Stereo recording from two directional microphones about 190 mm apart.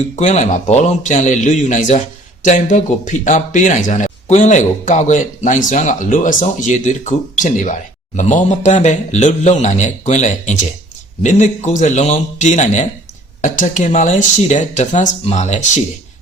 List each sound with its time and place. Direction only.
0.2 s speech: 40° left (ahead or behind)